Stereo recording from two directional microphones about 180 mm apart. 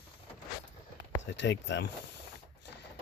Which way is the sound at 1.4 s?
85° left.